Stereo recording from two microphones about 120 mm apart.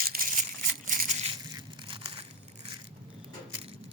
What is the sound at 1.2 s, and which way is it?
Crushing, 40° right (ahead or behind).